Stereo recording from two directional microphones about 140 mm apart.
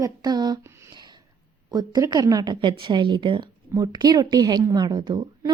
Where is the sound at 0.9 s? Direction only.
30° right (ahead or behind).